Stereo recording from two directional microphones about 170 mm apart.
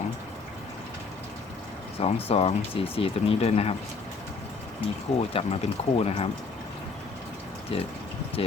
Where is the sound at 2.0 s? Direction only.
35° left (ahead or behind).